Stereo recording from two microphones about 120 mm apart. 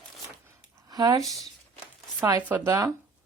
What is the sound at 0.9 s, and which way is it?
Speech, 30° right (ahead or behind).